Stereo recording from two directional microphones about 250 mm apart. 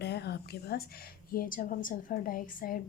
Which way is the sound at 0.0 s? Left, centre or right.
Left.